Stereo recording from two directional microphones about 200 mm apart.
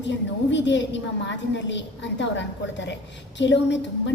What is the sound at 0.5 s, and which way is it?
A woman's voice, 65° left (ahead or behind).